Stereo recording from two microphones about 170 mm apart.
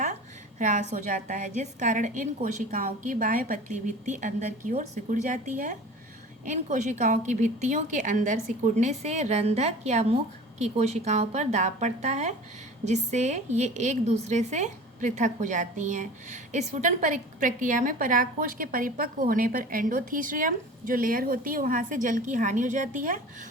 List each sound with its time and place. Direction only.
0.6 s a woman's voice: 45° right (ahead or behind)